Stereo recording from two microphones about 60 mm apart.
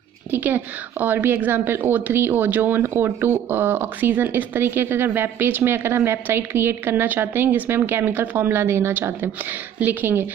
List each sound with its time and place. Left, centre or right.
0.3 s speech: right
9.8 s speech: right